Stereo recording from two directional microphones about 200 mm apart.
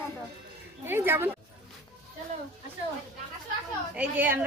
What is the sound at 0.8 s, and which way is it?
Speech, 10° right (ahead or behind).